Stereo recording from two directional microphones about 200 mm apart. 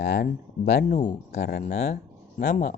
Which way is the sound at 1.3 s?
55° left (ahead or behind).